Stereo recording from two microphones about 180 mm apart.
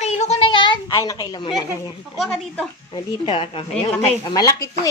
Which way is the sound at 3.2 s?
30° left (ahead or behind).